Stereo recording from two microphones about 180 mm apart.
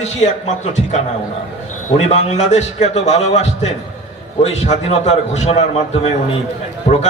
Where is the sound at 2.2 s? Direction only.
40° left (ahead or behind).